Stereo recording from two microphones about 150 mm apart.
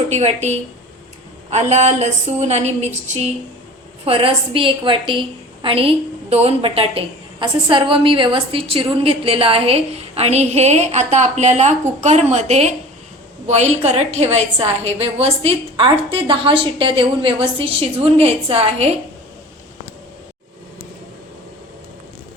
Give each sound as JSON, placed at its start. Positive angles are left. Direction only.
{"t": 0.1, "sound": "a woman's voice", "side_deg": -50}